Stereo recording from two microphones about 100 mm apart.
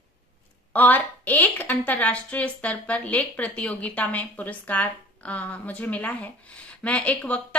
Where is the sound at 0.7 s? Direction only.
20° left (ahead or behind).